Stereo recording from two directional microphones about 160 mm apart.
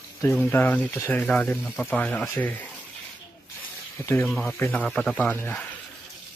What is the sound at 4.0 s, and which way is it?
Speech, 15° left (ahead or behind).